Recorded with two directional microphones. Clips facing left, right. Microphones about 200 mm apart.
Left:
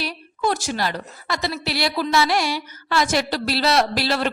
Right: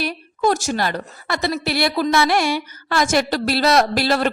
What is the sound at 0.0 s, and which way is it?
A woman's voice, 45° right (ahead or behind).